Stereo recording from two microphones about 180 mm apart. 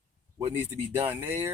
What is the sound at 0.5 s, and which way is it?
Speech, 10° right (ahead or behind).